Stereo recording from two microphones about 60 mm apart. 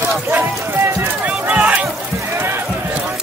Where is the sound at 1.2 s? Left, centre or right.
Right.